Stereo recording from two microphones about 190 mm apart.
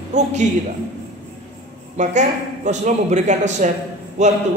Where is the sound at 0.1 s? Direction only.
40° right (ahead or behind).